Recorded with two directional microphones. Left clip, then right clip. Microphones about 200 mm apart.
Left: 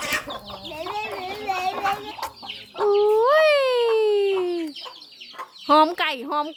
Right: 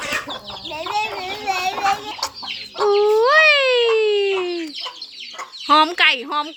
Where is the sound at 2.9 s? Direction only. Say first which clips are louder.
Right 3 dB; 5° left (ahead or behind).